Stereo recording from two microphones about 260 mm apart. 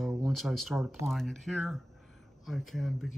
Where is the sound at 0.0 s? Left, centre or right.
Centre.